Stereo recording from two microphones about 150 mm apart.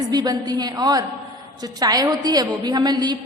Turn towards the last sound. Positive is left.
turn(degrees=-25)  # may be behind; listen again after turning